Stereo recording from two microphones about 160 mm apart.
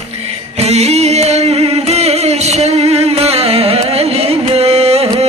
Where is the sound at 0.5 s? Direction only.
40° right (ahead or behind).